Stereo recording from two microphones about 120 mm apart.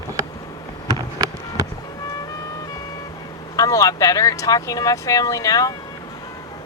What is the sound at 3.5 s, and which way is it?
Speech, 30° left (ahead or behind).